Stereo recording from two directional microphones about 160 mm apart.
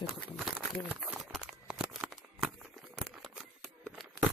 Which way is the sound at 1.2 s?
Centre (ahead or behind).